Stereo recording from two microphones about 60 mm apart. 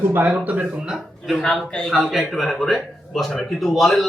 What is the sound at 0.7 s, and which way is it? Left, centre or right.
Speech, centre.